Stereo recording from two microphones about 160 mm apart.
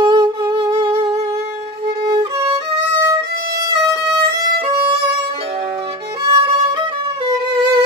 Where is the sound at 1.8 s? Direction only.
30° right (ahead or behind).